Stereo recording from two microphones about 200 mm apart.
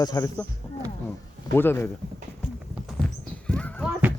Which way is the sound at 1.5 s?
10° left (ahead or behind).